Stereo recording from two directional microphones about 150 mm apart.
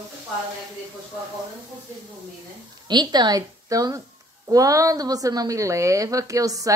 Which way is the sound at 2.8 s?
30° right (ahead or behind).